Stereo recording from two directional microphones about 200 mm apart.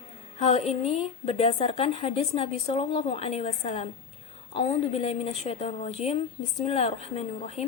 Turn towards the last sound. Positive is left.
turn(degrees=30)  # may be behind; listen again after turning